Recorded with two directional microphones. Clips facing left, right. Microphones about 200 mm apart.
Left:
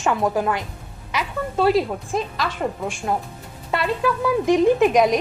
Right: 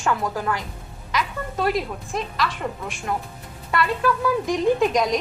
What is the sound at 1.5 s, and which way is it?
Speech, 30° left (ahead or behind).